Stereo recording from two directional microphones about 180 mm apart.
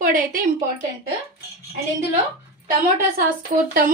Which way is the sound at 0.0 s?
45° right (ahead or behind).